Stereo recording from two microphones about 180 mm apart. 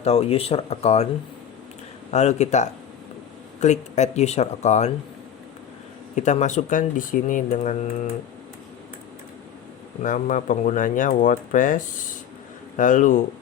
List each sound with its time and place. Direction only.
0.0 s speech: 35° left (ahead or behind)
2.0 s speech: 40° left (ahead or behind)
6.1 s speech: 40° left (ahead or behind)
10.0 s speech: 45° left (ahead or behind)